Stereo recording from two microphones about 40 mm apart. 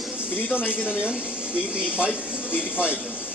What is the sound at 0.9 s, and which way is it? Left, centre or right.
Speech, centre.